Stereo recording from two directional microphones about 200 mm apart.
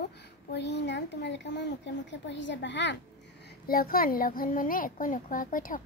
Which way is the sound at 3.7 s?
45° left (ahead or behind).